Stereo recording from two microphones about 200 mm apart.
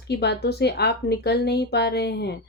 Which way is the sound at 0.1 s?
55° left (ahead or behind).